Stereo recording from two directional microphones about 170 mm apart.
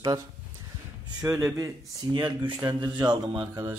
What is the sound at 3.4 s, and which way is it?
Speech, 15° right (ahead or behind).